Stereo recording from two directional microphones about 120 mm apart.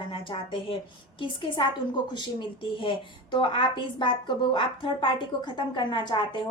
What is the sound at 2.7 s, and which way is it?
A woman's voice, 45° left (ahead or behind).